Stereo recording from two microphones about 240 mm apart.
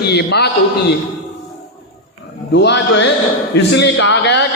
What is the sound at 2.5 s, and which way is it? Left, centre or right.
A man's voice, left.